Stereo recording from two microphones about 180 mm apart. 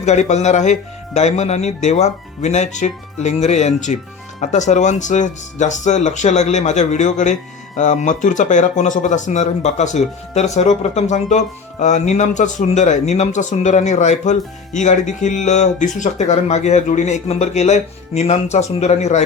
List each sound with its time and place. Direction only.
0.0 s speech: 40° left (ahead or behind)